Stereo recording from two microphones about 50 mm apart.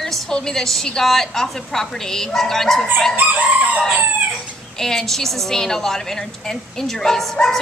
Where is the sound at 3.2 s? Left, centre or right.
Right.